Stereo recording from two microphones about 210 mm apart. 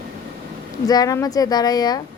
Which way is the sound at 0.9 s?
15° left (ahead or behind).